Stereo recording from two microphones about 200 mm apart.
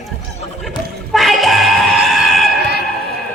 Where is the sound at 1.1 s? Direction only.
Centre (ahead or behind).